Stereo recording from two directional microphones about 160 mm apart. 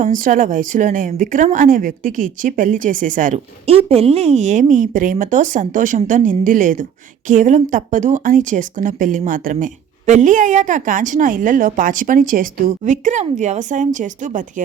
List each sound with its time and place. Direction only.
0.0 s speech: 55° right (ahead or behind)